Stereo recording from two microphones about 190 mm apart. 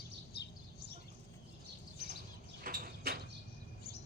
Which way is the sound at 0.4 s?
60° left (ahead or behind).